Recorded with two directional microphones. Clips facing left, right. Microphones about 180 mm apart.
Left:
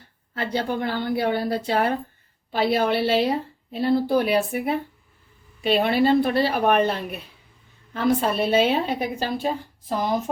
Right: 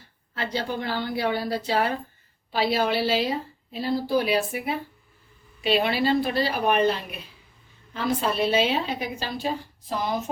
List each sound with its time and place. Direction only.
0.3 s a woman's voice: 55° left (ahead or behind)